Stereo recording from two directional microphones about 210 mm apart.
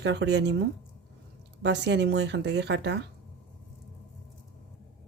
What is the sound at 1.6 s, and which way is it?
A woman's voice, 55° right (ahead or behind).